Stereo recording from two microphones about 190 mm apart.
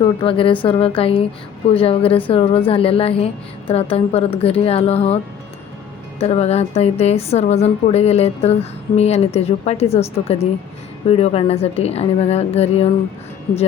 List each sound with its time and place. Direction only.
0.0 s a woman's voice: 30° left (ahead or behind)